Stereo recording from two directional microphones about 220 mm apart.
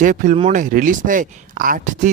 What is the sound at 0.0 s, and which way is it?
Speech, 35° right (ahead or behind).